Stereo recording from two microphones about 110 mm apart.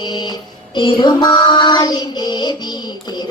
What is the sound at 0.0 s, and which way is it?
Child singing, 40° left (ahead or behind).